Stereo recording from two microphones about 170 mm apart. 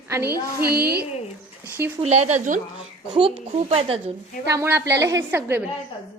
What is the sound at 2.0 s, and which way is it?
Speech, 40° right (ahead or behind).